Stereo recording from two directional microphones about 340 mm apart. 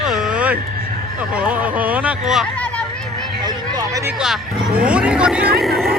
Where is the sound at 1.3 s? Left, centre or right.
Centre.